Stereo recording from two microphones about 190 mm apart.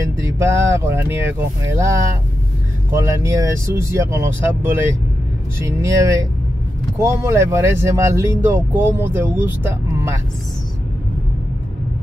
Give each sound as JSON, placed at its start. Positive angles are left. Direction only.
{"t": 0.2, "sound": "speech", "side_deg": -15}
{"t": 5.6, "sound": "speech", "side_deg": -15}